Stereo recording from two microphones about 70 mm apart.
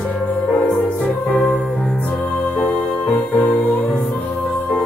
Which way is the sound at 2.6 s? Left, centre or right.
Left.